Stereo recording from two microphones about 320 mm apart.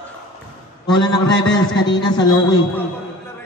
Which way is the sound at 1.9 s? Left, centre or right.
Centre.